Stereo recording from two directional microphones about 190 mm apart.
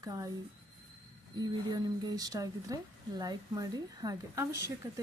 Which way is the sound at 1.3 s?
20° right (ahead or behind).